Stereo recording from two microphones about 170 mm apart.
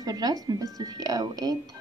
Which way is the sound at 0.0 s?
20° right (ahead or behind).